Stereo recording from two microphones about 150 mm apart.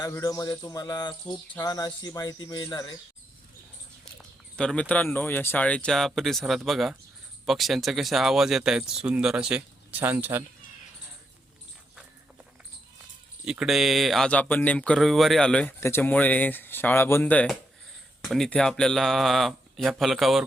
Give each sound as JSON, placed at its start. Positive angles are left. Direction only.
{"t": 0.0, "sound": "speech", "side_deg": 25}
{"t": 4.2, "sound": "speech", "side_deg": 5}
{"t": 13.4, "sound": "speech", "side_deg": -5}
{"t": 18.2, "sound": "speech", "side_deg": 0}